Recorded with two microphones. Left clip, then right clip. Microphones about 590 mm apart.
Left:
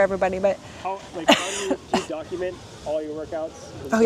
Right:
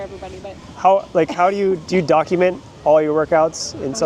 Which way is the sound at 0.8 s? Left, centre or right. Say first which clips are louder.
Right 16 dB; right.